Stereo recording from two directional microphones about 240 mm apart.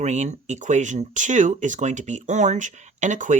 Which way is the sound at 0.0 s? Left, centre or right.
Right.